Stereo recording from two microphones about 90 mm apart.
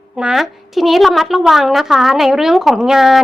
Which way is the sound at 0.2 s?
5° right (ahead or behind).